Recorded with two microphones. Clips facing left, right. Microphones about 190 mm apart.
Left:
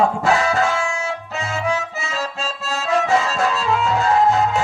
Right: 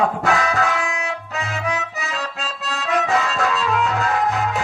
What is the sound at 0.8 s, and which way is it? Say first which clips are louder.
Music: left 2 dB; 15° right (ahead or behind).